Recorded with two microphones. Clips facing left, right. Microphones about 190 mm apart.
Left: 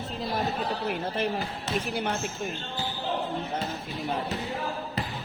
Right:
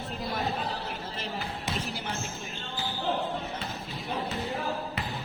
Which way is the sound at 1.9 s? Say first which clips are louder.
Left 7 dB; 60° left (ahead or behind).